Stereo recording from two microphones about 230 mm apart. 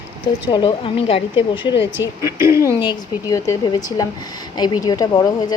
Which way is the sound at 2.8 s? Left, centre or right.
Centre.